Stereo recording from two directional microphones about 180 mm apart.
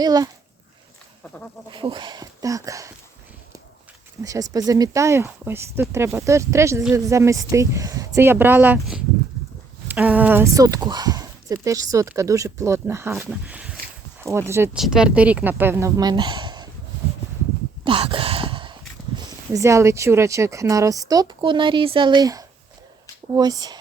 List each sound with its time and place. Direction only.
0.0 s speech: 20° right (ahead or behind)
1.7 s speech: 25° right (ahead or behind)
4.2 s speech: 20° right (ahead or behind)
14.8 s speech: 5° right (ahead or behind); by 16.6 s 25° right (ahead or behind)
17.8 s speech: 30° right (ahead or behind)